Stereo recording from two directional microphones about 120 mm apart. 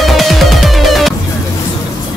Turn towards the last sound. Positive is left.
turn(degrees=0)  # may be behind; listen again after turning